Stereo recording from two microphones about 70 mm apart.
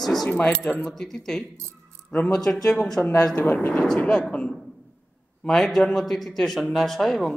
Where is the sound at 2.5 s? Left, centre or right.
Centre.